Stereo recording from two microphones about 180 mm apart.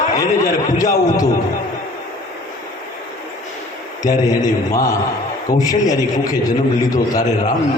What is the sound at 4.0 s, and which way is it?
A man's voice, 20° left (ahead or behind).